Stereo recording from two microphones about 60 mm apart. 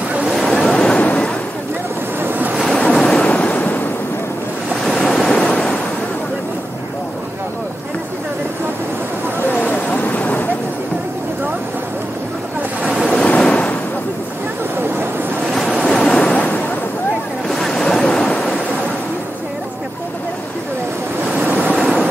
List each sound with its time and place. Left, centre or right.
0.3 s a sound: centre
2.1 s waves: right
2.9 s waves: centre
3.3 s waves: left
4.8 s waves: centre
5.5 s waves: centre
9.5 s vehicle: left
13.0 s waves: centre
15.8 s waves: centre
16.3 s a sound: left
17.5 s waves: centre
21.7 s vehicle: centre